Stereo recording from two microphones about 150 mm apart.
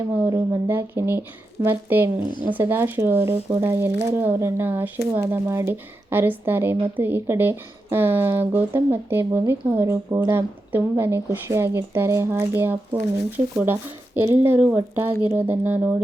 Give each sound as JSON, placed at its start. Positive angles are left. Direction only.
{"t": 0.3, "sound": "speech", "side_deg": -15}